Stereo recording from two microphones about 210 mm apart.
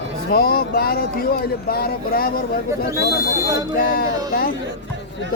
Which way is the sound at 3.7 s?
45° left (ahead or behind).